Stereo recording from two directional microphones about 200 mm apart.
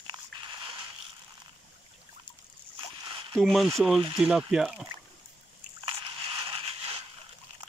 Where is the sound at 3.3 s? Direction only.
Centre (ahead or behind).